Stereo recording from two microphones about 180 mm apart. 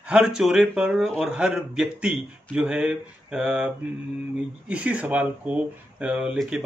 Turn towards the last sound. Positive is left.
turn(degrees=-5)  # may be behind; listen again after turning